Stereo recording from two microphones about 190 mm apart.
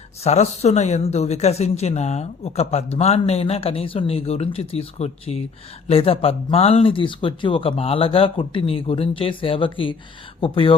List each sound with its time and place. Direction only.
0.2 s speech: 35° left (ahead or behind)